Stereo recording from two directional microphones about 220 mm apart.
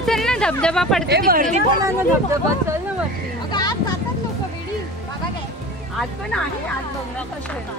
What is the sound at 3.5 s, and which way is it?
Vehicle, 15° left (ahead or behind).